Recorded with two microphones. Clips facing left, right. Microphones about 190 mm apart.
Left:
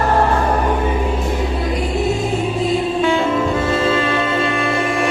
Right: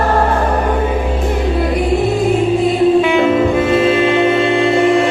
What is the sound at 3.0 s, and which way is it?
Music, 15° right (ahead or behind).